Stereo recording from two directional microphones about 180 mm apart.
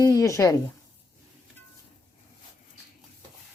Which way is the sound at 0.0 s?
20° left (ahead or behind).